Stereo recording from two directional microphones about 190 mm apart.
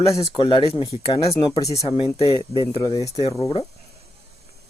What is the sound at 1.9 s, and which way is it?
Speech, 25° left (ahead or behind).